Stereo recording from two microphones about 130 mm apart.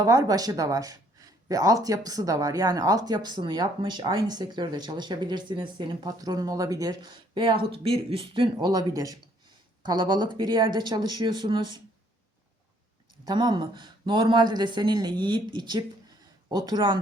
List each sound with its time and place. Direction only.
0.0 s speech: 30° right (ahead or behind)
7.3 s speech: 40° right (ahead or behind)
13.2 s speech: 35° right (ahead or behind)